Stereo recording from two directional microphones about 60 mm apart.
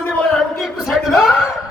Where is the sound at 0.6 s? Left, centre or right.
Centre.